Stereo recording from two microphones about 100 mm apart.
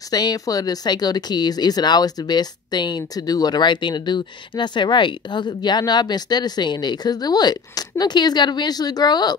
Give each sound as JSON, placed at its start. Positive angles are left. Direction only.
{"t": 0.1, "sound": "speech", "side_deg": 40}